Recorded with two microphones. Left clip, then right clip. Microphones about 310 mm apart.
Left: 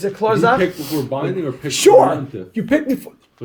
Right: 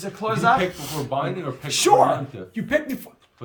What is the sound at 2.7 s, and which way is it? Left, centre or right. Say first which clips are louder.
Speech: left 5 dB; right.